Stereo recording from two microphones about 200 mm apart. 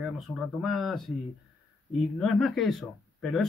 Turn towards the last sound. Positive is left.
turn(degrees=0)  # may be behind; listen again after turning